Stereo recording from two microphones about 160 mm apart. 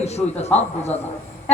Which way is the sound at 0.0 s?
45° left (ahead or behind).